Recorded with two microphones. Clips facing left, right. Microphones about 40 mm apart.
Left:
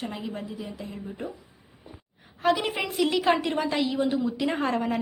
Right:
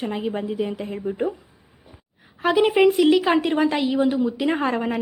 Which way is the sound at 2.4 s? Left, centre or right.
Centre.